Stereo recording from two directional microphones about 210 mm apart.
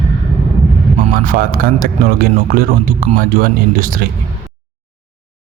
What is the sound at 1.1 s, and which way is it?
A man's voice, 40° right (ahead or behind).